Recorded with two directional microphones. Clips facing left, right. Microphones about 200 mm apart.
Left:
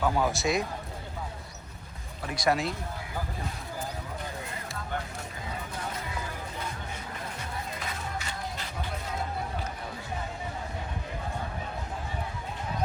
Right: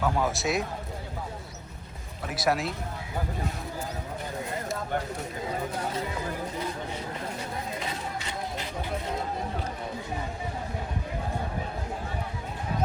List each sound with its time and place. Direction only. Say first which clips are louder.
0.0 s a man's voice: even; centre (ahead or behind)
2.2 s a man's voice: even; centre (ahead or behind)